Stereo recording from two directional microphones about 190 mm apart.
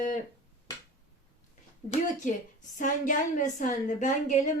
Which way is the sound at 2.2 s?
45° left (ahead or behind).